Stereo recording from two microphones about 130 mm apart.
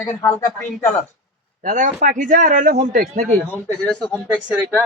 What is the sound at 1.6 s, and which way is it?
Speech, 70° right (ahead or behind).